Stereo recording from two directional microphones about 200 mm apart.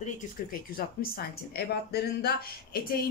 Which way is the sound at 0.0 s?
45° left (ahead or behind).